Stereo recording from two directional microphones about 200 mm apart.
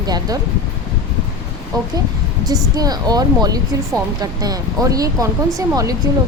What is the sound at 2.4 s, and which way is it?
Speech, 20° right (ahead or behind).